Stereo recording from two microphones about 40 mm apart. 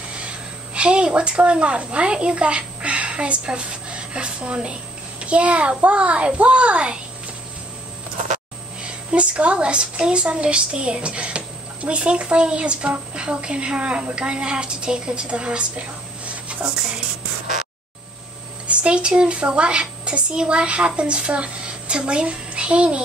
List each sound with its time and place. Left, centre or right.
0.7 s a woman's voice: right
8.8 s a woman's voice: right
16.3 s a sound: right
18.7 s a woman's voice: right